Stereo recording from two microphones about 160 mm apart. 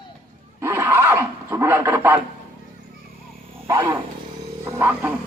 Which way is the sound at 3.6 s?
20° right (ahead or behind).